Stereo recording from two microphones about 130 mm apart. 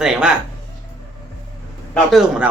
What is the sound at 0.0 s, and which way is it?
Speech, 5° right (ahead or behind).